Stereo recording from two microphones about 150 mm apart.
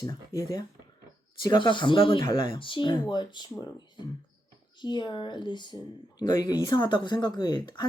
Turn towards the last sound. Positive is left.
turn(degrees=30)  # may be behind; listen again after turning